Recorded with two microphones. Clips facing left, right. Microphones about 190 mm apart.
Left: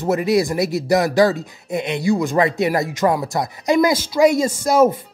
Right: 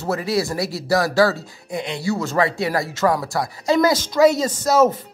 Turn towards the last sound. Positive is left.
turn(degrees=10)  # may be behind; listen again after turning